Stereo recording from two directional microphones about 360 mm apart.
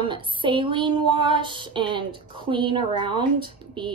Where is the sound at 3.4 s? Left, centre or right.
Centre.